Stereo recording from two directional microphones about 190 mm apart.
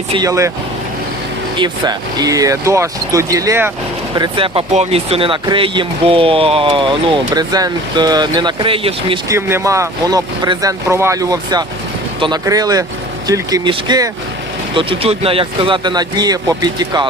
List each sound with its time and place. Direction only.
0.2 s speech: 15° right (ahead or behind)
1.5 s speech: 25° right (ahead or behind)
9.3 s speech: 15° right (ahead or behind)